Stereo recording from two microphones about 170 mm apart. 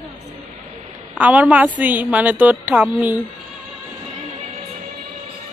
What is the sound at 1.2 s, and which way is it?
Speech, 10° right (ahead or behind).